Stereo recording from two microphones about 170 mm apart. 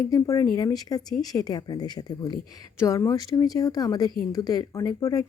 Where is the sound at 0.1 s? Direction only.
20° left (ahead or behind).